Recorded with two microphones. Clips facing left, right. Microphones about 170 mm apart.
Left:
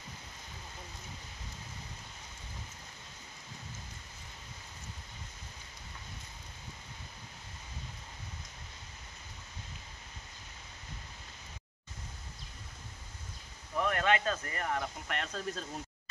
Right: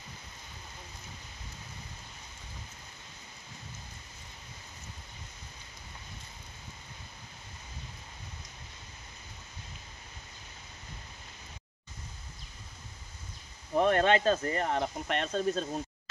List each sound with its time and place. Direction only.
13.7 s speech: 30° right (ahead or behind)